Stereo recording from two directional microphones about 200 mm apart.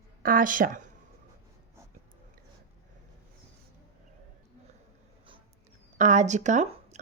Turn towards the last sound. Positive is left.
turn(degrees=-35)  # may be behind; listen again after turning